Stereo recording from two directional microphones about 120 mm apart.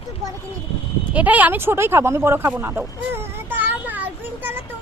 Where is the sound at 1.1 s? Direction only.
15° right (ahead or behind).